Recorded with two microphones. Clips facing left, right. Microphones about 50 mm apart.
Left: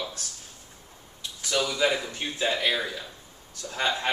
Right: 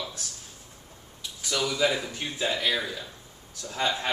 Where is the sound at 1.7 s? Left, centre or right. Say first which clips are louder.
Left 1 dB; centre.